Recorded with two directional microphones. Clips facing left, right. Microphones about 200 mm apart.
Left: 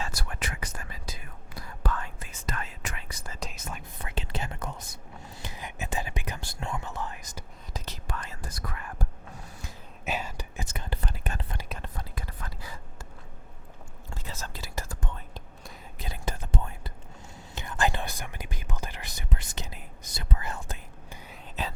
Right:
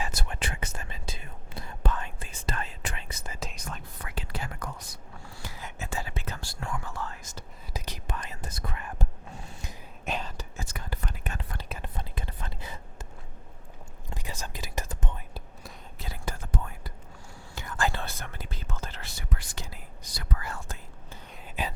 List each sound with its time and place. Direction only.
0.0 s whispering: 25° right (ahead or behind)
3.9 s whispering: 25° left (ahead or behind)
8.0 s whispering: 20° right (ahead or behind)
10.1 s whispering: 10° left (ahead or behind); by 11.5 s 35° left (ahead or behind)
11.8 s whispering: 25° right (ahead or behind)
14.1 s whispering: 15° right (ahead or behind)
16.0 s whispering: 20° left (ahead or behind)
21.6 s a sound: 10° right (ahead or behind)